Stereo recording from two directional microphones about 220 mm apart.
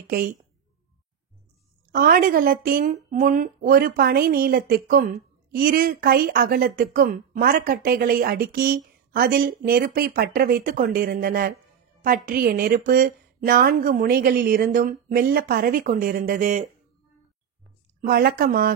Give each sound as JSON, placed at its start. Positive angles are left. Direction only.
{"t": 0.0, "sound": "speech", "side_deg": -40}
{"t": 1.9, "sound": "speech", "side_deg": -40}
{"t": 18.0, "sound": "speech", "side_deg": -40}